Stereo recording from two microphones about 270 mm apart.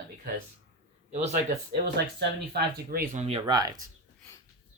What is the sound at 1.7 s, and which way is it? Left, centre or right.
Speech, right.